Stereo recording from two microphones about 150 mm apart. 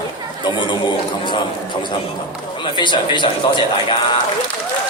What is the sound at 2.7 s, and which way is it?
Speech, 30° left (ahead or behind).